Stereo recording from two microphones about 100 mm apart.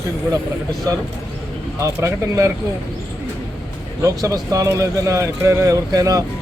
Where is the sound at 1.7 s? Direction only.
30° right (ahead or behind).